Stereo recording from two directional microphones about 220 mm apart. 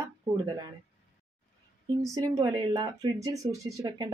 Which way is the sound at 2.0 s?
15° right (ahead or behind).